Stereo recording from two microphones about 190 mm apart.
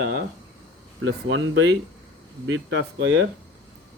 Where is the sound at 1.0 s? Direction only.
80° right.